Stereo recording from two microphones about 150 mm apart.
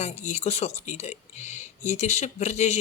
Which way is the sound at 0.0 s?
50° left (ahead or behind).